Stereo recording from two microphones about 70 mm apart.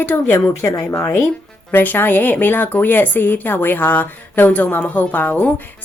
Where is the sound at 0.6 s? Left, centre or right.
Left.